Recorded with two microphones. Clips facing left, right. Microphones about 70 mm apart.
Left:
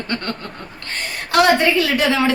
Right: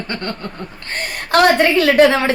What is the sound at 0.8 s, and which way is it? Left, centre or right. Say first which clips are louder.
A woman's voice: right 2 dB; right.